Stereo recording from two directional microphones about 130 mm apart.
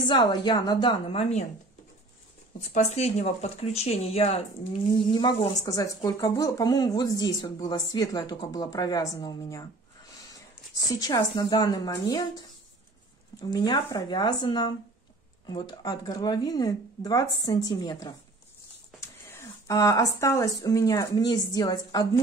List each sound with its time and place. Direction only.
0.1 s a woman's voice: 35° left (ahead or behind); by 1.4 s 50° left (ahead or behind)
2.7 s speech: 55° left (ahead or behind)
5.5 s speech: 30° left (ahead or behind)
10.9 s a woman's voice: 30° left (ahead or behind)
13.4 s a woman's voice: 30° left (ahead or behind)
18.9 s speech: 20° left (ahead or behind)